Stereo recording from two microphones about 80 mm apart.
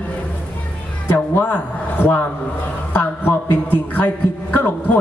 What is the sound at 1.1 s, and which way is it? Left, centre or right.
A man's voice, left.